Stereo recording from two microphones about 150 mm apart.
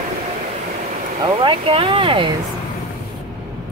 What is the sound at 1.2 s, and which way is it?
Speech, 35° right (ahead or behind).